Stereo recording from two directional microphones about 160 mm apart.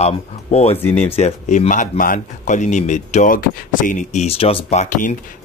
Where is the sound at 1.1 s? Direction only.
40° left (ahead or behind).